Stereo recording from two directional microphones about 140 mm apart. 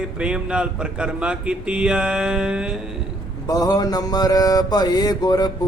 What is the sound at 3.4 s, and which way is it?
Mantra, 25° left (ahead or behind).